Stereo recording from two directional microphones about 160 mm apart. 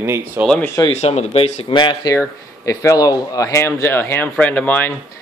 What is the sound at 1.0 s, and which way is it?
Speech, 40° left (ahead or behind).